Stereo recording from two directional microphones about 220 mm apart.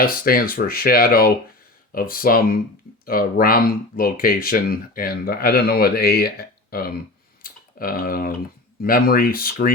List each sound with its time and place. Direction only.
0.0 s speech: 40° left (ahead or behind)
7.4 s typing: 40° left (ahead or behind)
8.8 s speech: 40° left (ahead or behind)